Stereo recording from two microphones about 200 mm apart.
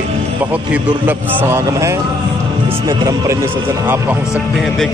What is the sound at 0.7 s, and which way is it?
A man's voice, 10° right (ahead or behind).